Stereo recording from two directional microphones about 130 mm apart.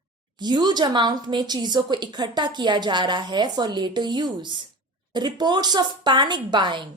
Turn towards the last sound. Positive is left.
turn(degrees=-35)  # may be behind; listen again after turning